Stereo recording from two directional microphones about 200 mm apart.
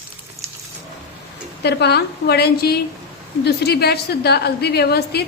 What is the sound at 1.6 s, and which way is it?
A woman's voice, 55° left (ahead or behind).